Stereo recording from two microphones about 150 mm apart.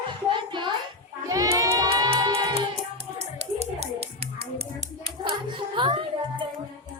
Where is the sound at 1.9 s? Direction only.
30° right (ahead or behind).